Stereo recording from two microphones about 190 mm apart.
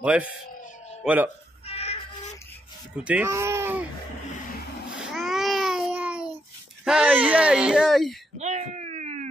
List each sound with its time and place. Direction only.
0.0 s speech: 5° right (ahead or behind)
1.7 s child singing: 35° left (ahead or behind)
3.0 s speech: 5° right (ahead or behind)
4.9 s babbling: centre (ahead or behind)
6.8 s speech: 5° right (ahead or behind)
8.4 s a sound: 35° right (ahead or behind)